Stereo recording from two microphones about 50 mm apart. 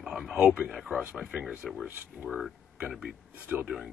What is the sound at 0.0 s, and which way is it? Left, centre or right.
Radio, centre.